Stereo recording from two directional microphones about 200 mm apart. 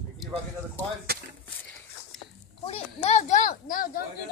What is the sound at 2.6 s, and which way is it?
Speech, 30° left (ahead or behind).